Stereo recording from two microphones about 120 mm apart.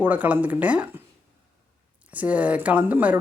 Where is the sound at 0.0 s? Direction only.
15° right (ahead or behind).